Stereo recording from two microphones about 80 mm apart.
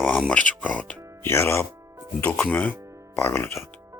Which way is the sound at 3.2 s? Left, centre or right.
Left.